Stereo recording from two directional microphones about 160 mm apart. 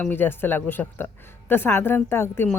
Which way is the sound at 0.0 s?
10° left (ahead or behind).